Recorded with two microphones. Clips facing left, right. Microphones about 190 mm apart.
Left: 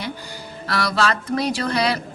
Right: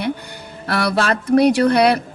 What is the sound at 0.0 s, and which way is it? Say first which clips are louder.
Speech: right 7 dB; 60° right (ahead or behind).